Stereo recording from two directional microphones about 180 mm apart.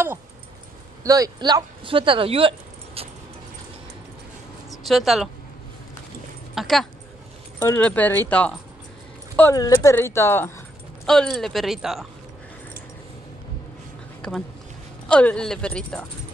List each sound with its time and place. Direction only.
1.0 s speech: 20° right (ahead or behind)
4.6 s speech: centre (ahead or behind)
6.5 s speech: centre (ahead or behind)
7.5 s speech: 15° left (ahead or behind)
9.4 s speech: 20° left (ahead or behind)
11.1 s speech: 5° left (ahead or behind)
14.2 s speech: 5° left (ahead or behind)